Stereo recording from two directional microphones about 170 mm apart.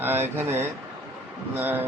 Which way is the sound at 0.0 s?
10° right (ahead or behind).